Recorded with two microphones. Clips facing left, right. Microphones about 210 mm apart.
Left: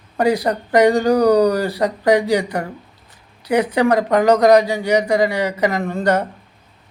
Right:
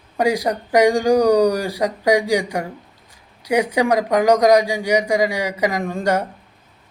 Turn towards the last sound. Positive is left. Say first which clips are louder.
# left 2 dB
turn(degrees=-10)  # may be behind; listen again after turning